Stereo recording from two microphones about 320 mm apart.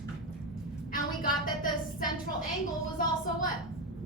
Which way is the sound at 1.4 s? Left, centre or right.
Left.